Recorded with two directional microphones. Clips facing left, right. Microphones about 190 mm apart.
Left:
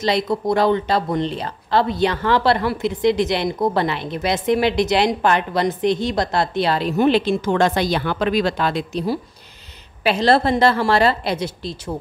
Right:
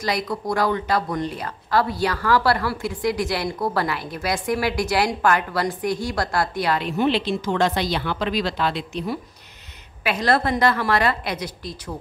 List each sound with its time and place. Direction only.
0.0 s speech: 25° left (ahead or behind)